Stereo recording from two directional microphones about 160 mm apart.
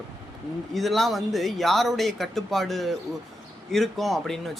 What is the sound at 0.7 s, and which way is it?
Speech, centre (ahead or behind).